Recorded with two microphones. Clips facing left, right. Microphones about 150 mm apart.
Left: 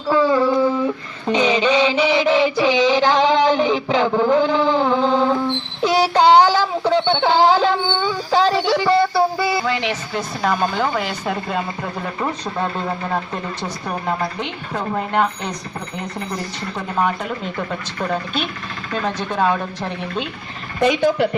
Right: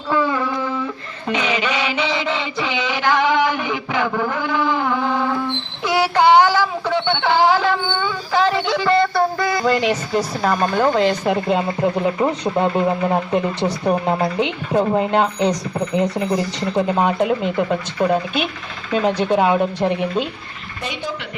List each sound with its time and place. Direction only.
0.2 s a sound: 30° left (ahead or behind)
1.3 s music: 5° right (ahead or behind)
2.0 s a sound: 15° left (ahead or behind)
8.9 s music: 5° left (ahead or behind)
10.4 s speech: 5° right (ahead or behind)
11.3 s speech: 20° right (ahead or behind)
14.7 s speech: 20° right (ahead or behind)
16.0 s speech: 90° right
16.7 s speech: 20° right (ahead or behind)
19.2 s speech: 15° right (ahead or behind)
20.8 s a woman's voice: 60° left (ahead or behind)